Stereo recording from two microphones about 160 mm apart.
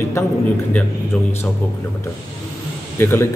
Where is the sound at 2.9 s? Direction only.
15° left (ahead or behind).